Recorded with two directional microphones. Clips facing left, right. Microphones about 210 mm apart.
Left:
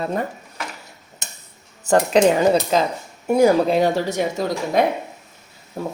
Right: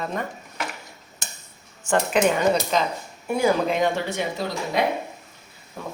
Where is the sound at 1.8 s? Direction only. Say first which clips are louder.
Left 5 dB; 35° left (ahead or behind).